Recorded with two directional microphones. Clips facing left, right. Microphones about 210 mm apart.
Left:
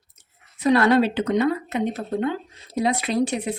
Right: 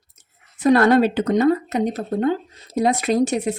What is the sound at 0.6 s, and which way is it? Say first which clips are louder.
Speech: right 3 dB; 50° right (ahead or behind).